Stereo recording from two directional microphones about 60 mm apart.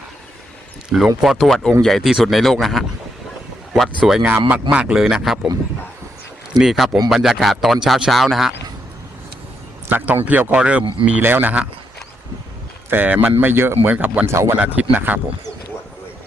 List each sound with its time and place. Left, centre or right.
1.2 s speech: centre
4.4 s speech: right
6.6 s speech: centre
9.9 s speech: right
11.2 s speech: right
13.1 s speech: right
13.9 s speech: right
14.3 s speech: right
14.6 s speech: right